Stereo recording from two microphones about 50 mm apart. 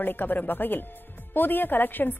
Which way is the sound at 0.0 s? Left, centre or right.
Left.